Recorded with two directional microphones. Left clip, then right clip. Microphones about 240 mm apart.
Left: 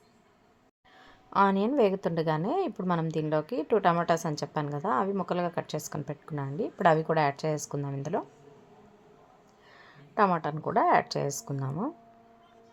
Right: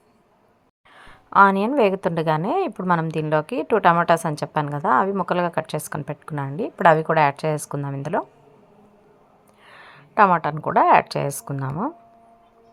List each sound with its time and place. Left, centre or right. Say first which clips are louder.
0.9 s a woman's voice: right 11 dB; centre
9.6 s a woman's voice: right 10 dB; centre